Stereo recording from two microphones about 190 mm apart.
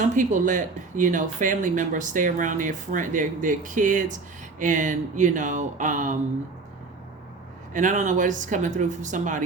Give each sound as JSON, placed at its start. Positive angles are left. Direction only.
{"t": 0.2, "sound": "speech", "side_deg": -40}
{"t": 7.7, "sound": "speech", "side_deg": -40}